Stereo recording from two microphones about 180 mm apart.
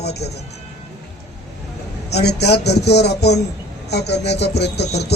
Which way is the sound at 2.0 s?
70° left (ahead or behind).